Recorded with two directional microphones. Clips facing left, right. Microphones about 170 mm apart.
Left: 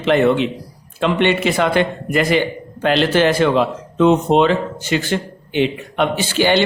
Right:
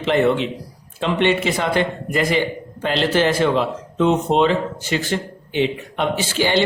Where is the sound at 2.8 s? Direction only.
70° left (ahead or behind).